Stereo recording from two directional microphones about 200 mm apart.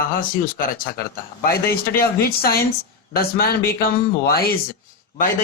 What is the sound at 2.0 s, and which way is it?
Speech, 50° left (ahead or behind).